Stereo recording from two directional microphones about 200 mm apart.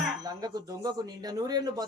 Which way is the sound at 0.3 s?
20° right (ahead or behind).